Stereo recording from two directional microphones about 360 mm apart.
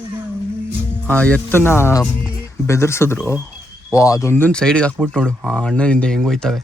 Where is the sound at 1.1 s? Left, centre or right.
Centre.